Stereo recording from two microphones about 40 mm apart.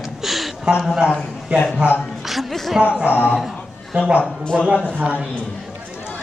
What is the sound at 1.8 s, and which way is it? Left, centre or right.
Speech, right.